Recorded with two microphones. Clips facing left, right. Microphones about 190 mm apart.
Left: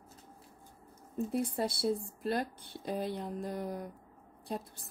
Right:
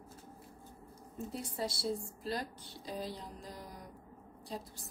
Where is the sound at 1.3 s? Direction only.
55° left (ahead or behind).